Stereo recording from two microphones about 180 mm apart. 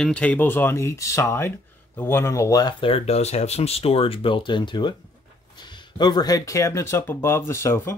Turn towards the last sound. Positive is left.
turn(degrees=15)  # may be behind; listen again after turning